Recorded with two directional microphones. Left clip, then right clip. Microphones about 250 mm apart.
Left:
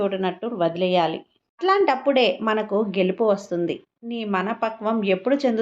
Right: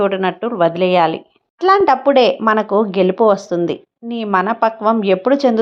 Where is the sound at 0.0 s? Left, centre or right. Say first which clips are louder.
Right 8 dB; centre.